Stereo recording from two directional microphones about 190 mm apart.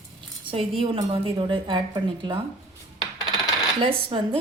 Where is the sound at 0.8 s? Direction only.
30° right (ahead or behind).